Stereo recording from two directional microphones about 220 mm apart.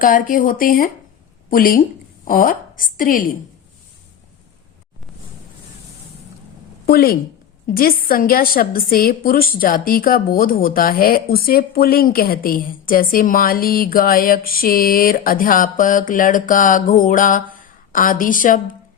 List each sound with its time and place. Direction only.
0.0 s a woman's voice: 40° left (ahead or behind)
6.8 s a woman's voice: 45° left (ahead or behind)